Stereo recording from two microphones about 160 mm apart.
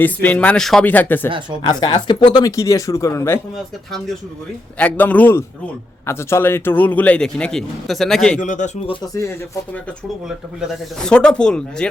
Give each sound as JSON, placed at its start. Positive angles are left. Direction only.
{"t": 0.0, "sound": "a man's voice", "side_deg": 10}
{"t": 1.6, "sound": "speech", "side_deg": 30}
{"t": 4.8, "sound": "a man's voice", "side_deg": 10}
{"t": 8.4, "sound": "speech", "side_deg": 50}
{"t": 10.2, "sound": "speech", "side_deg": 0}